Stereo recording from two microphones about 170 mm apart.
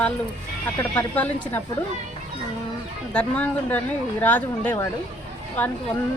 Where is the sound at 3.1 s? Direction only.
5° left (ahead or behind).